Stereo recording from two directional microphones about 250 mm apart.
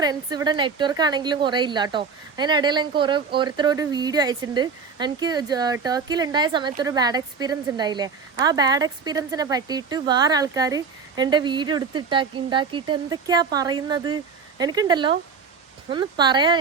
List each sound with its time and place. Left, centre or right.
0.0 s speech: centre